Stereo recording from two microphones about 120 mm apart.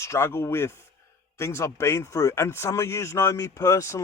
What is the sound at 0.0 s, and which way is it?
Speech, 25° left (ahead or behind).